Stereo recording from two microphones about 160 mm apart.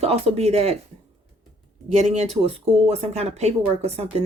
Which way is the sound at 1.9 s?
45° right (ahead or behind).